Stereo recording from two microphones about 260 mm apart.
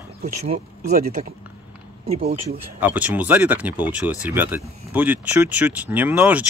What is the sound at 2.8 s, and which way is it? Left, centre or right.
Speech, centre.